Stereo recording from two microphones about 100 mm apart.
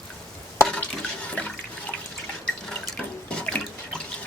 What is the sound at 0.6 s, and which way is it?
Water, 15° left (ahead or behind).